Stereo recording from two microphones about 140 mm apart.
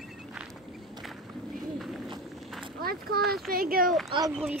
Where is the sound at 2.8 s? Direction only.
90° right.